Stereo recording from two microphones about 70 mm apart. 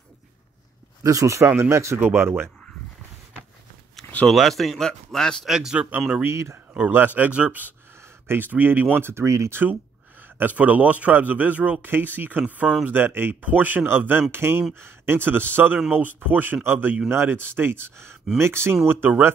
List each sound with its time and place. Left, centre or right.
1.0 s speech: right
2.0 s speech: right
4.3 s speech: centre
5.5 s a man's voice: centre
5.8 s a man's voice: right
6.2 s speech: right
6.7 s a man's voice: right
10.2 s a man's voice: right